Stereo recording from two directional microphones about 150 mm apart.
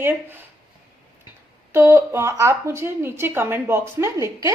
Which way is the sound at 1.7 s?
15° right (ahead or behind).